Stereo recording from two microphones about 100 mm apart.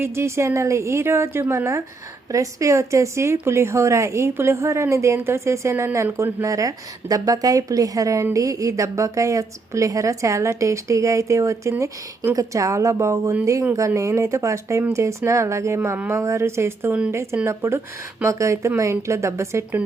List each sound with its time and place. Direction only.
0.0 s a woman's voice: 25° right (ahead or behind)